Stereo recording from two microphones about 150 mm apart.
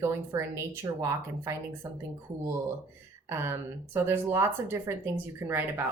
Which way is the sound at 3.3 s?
15° right (ahead or behind).